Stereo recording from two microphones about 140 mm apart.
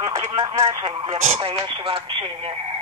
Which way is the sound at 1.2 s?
45° right (ahead or behind).